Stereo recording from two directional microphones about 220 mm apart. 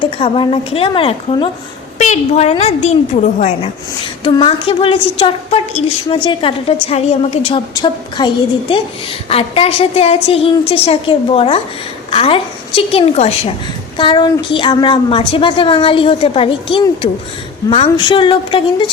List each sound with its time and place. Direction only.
0.0 s a woman's voice: 25° left (ahead or behind)